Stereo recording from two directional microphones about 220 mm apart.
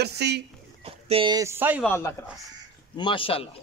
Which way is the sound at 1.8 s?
10° left (ahead or behind).